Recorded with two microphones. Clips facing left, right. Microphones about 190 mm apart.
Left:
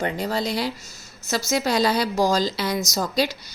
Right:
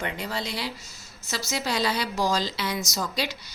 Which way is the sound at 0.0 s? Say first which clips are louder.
Left 7 dB; 40° left (ahead or behind).